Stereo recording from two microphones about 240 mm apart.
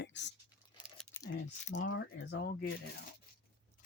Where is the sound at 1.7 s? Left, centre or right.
Left.